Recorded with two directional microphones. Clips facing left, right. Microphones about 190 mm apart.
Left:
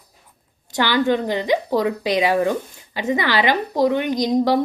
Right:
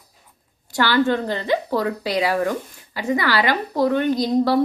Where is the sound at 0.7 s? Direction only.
15° left (ahead or behind).